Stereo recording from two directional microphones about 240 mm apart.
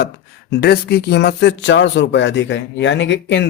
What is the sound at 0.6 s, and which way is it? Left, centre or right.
Speech, left.